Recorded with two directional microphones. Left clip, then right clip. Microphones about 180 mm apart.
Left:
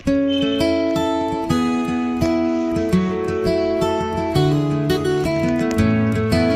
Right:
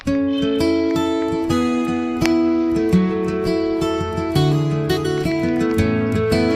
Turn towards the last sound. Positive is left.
turn(degrees=0)  # may be behind; listen again after turning